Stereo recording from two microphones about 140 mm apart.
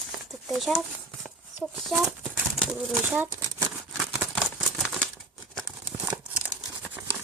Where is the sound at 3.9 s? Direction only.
5° right (ahead or behind).